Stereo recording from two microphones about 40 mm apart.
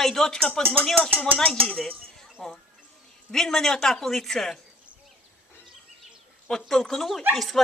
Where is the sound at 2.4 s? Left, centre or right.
Centre.